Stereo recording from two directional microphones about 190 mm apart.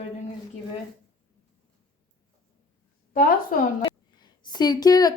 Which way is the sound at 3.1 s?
45° left (ahead or behind).